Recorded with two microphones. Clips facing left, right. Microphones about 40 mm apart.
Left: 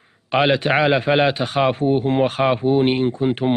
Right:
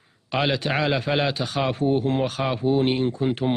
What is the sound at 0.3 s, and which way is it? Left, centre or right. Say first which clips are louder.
A man's voice: left 6 dB; left.